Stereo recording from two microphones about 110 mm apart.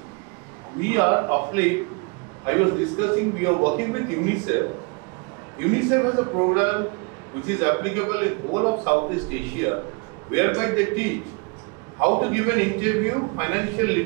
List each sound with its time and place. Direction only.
0.7 s a man's voice: 25° right (ahead or behind)